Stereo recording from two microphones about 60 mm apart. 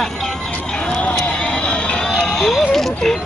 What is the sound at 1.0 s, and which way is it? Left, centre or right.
Music, centre.